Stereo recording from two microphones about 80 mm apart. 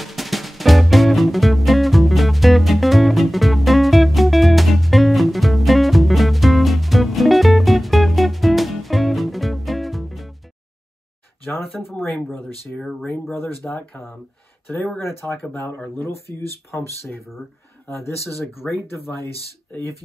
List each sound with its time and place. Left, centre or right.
0.0 s music: centre
12.0 s speech: centre
13.0 s speech: left
18.6 s speech: centre
19.0 s speech: left